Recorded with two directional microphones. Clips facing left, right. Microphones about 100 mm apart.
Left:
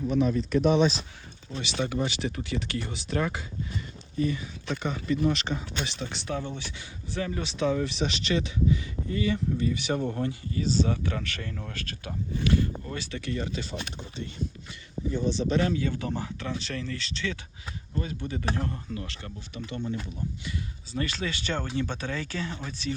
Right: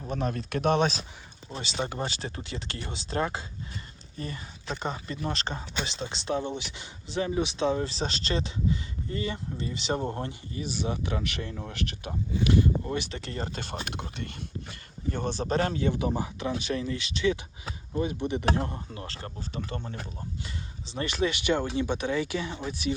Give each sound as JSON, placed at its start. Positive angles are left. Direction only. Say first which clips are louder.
{"t": 0.0, "sound": "speech", "louder": "left 7 dB", "side_deg": -40}
{"t": 0.3, "sound": "speech", "louder": "left 3 dB", "side_deg": -60}
{"t": 1.5, "sound": "speech", "louder": "left 2 dB", "side_deg": -35}
{"t": 10.6, "sound": "speech", "louder": "left 5 dB", "side_deg": -15}
{"t": 13.6, "sound": "speech", "louder": "even", "side_deg": -60}
{"t": 15.4, "sound": "speech", "louder": "even", "side_deg": -40}
{"t": 15.8, "sound": "speech", "louder": "right 3 dB", "side_deg": -20}
{"t": 20.5, "sound": "speech", "louder": "left 4 dB", "side_deg": -25}